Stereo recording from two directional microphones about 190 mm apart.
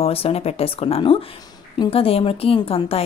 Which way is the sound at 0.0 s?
30° left (ahead or behind).